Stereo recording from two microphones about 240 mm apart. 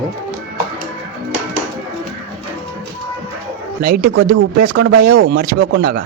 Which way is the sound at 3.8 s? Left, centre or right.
Right.